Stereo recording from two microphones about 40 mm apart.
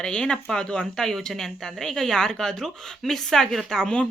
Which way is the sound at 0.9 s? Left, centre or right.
Centre.